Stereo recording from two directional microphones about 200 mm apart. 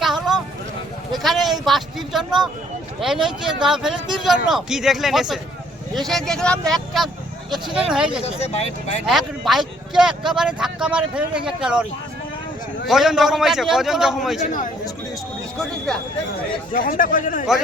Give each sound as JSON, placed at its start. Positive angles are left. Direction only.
{"t": 0.0, "sound": "a sound", "side_deg": 0}
{"t": 1.1, "sound": "sheep", "side_deg": 0}
{"t": 1.6, "sound": "speech", "side_deg": 0}
{"t": 8.2, "sound": "speech", "side_deg": 30}
{"t": 9.0, "sound": "speech", "side_deg": 0}
{"t": 12.9, "sound": "speech", "side_deg": 0}
{"t": 14.4, "sound": "speech", "side_deg": 40}
{"t": 16.7, "sound": "speech", "side_deg": 45}